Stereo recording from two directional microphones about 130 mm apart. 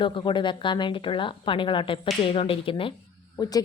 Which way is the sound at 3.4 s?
30° left (ahead or behind).